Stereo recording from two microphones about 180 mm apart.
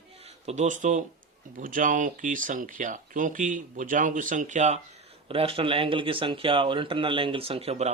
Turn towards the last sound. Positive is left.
turn(degrees=-35)  # may be behind; listen again after turning